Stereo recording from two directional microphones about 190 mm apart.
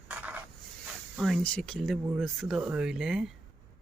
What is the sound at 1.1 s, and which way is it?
Speech, centre (ahead or behind).